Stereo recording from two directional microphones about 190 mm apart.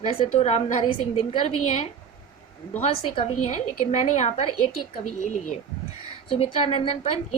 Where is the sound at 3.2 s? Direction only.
35° left (ahead or behind).